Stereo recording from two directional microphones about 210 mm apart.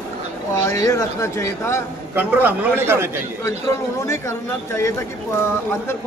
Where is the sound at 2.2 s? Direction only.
10° right (ahead or behind).